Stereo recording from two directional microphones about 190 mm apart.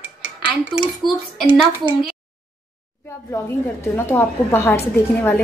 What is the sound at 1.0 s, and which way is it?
A woman's voice, centre (ahead or behind).